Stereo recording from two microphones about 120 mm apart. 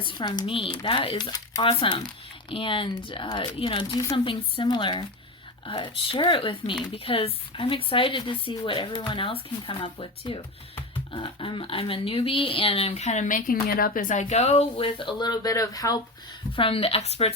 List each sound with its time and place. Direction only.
0.0 s speech: 40° left (ahead or behind)
3.9 s speech: 30° left (ahead or behind)
4.2 s speech: 45° left (ahead or behind); by 14.8 s 60° left (ahead or behind)
14.8 s speech: 45° left (ahead or behind)
16.6 s speech: 50° left (ahead or behind)